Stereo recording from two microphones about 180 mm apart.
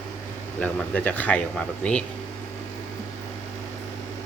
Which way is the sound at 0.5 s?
10° left (ahead or behind).